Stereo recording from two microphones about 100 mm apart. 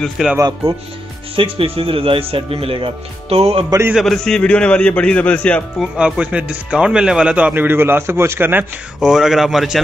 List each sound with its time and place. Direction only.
0.4 s speech: 40° right (ahead or behind)
1.3 s speech: 65° right (ahead or behind); by 3.6 s 85° right
3.9 s a man's voice: 5° left (ahead or behind)
5.8 s speech: 10° right (ahead or behind)
9.0 s speech: 5° right (ahead or behind)